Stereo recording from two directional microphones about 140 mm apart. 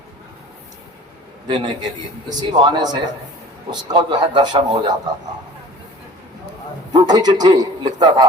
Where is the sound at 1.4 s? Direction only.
35° right (ahead or behind).